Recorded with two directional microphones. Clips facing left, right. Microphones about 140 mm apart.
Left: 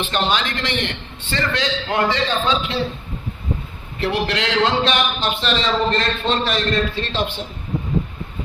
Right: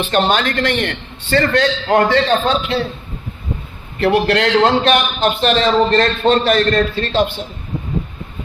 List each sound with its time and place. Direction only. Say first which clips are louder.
0.1 s a man's voice: right 8 dB; 50° right (ahead or behind)
4.0 s a man's voice: right 7 dB; 55° right (ahead or behind)